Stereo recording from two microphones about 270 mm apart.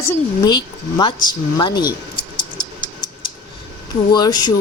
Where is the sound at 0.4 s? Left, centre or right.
Centre.